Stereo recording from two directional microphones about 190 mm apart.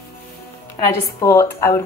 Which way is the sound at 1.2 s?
15° left (ahead or behind).